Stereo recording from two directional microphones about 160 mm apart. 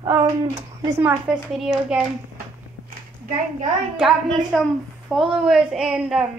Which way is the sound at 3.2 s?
60° right (ahead or behind).